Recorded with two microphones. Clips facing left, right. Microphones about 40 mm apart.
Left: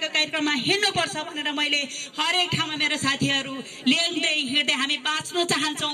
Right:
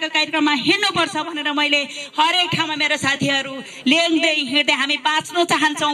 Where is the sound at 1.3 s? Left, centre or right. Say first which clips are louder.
Right 6 dB; right.